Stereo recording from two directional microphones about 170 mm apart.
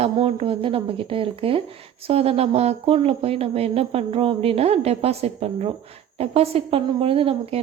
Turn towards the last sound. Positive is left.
turn(degrees=-35)  # may be behind; listen again after turning